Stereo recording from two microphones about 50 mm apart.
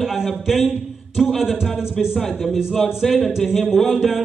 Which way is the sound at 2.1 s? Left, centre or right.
Centre.